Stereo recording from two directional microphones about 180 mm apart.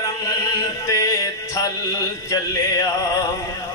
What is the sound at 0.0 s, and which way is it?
Music, 20° left (ahead or behind).